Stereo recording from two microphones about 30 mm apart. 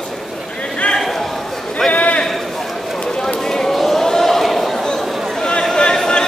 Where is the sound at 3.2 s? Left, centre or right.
Centre.